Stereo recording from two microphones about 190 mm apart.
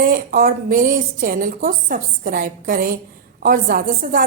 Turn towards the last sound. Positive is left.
turn(degrees=-50)  # may be behind; listen again after turning